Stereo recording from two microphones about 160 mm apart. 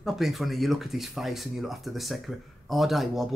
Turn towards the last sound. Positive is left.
turn(degrees=0)  # may be behind; listen again after turning